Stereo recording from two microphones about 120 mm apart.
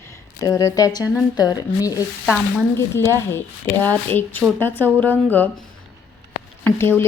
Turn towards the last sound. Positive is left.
turn(degrees=20)  # may be behind; listen again after turning